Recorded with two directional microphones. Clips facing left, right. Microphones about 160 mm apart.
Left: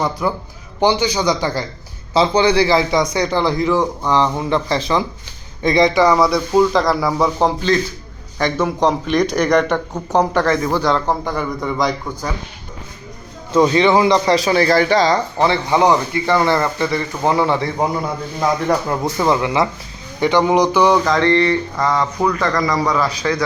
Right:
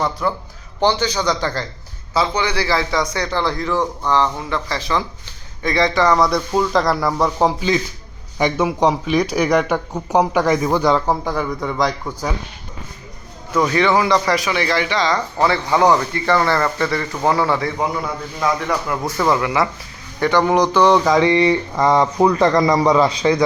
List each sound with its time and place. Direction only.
0.0 s a man's voice: 15° left (ahead or behind)
2.1 s a man's voice: 25° left (ahead or behind); by 12.3 s centre (ahead or behind)
13.5 s speech: 20° left (ahead or behind); by 15.2 s 35° left (ahead or behind)
15.4 s speech: 20° left (ahead or behind)
19.0 s a man's voice: 20° left (ahead or behind)
21.0 s speech: 10° right (ahead or behind)